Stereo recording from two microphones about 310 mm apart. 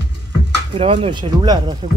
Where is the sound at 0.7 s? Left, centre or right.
Centre.